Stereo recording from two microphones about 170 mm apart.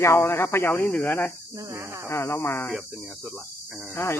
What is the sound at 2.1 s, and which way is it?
Speech, 15° left (ahead or behind).